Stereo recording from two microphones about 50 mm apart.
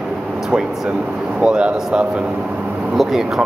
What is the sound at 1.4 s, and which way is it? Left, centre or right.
Speech, centre.